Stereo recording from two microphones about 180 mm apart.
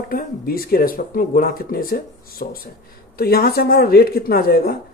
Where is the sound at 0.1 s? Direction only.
55° left (ahead or behind).